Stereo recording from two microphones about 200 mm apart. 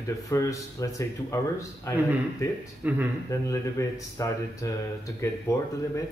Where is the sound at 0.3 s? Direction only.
15° left (ahead or behind).